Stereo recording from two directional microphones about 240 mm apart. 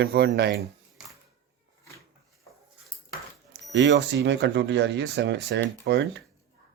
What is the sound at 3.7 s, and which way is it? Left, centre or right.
Speech, right.